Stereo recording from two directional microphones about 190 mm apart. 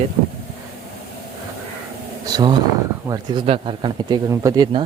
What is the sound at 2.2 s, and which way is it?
Speech, 20° right (ahead or behind).